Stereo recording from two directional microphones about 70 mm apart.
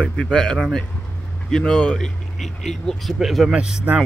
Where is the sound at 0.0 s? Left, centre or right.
Centre.